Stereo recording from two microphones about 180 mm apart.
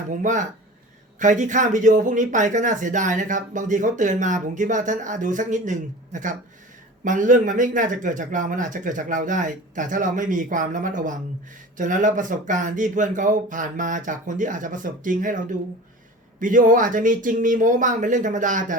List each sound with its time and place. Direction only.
0.1 s speech: 45° right (ahead or behind)